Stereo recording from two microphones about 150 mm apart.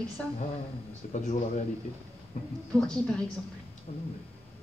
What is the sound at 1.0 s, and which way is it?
Speech, 60° left (ahead or behind).